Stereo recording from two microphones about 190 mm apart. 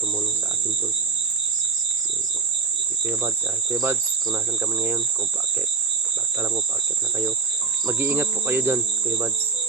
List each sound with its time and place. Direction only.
3.1 s cricket: 10° right (ahead or behind)
7.9 s cricket: 10° right (ahead or behind)